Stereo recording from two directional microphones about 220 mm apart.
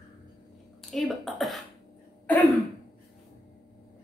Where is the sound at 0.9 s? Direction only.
Centre (ahead or behind).